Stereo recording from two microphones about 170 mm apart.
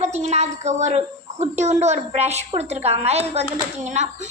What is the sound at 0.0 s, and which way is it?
A child's voice, 40° right (ahead or behind).